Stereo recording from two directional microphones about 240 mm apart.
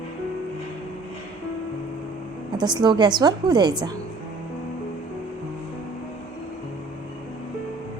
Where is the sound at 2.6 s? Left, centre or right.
Centre.